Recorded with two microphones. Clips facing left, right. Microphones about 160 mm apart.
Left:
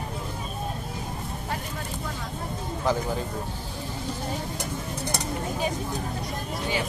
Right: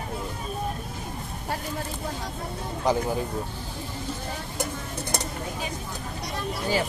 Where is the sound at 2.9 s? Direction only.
15° right (ahead or behind).